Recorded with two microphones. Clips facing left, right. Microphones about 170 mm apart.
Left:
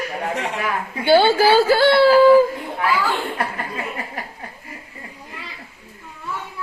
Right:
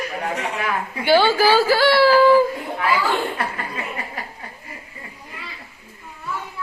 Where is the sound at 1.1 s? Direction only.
30° left (ahead or behind).